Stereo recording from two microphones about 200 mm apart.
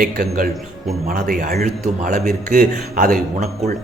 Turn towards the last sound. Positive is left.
turn(degrees=-40)  # may be behind; listen again after turning